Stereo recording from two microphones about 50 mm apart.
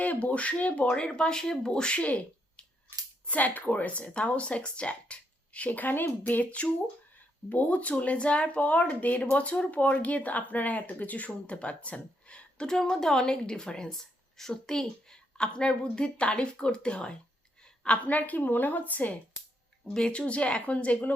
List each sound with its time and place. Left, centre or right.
0.0 s speech: left
12.6 s a woman's voice: centre; by 19.1 s left
19.9 s speech: centre